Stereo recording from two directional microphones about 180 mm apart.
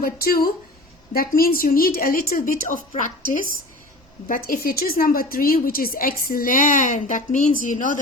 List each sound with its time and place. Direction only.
0.0 s a woman's voice: 55° left (ahead or behind)
4.3 s a woman's voice: 55° left (ahead or behind)